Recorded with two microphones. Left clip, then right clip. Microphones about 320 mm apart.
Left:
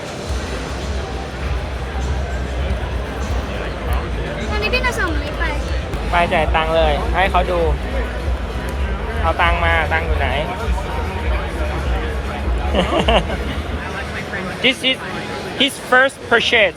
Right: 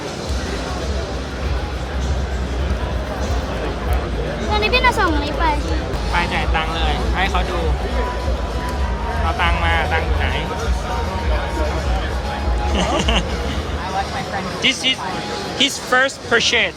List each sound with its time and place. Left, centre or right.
4.7 s a sound: centre
6.1 s speech: centre
9.4 s speech: centre
12.7 s speech: centre
14.6 s speech: centre